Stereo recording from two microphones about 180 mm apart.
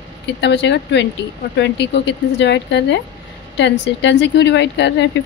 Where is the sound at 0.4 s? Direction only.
75° left (ahead or behind).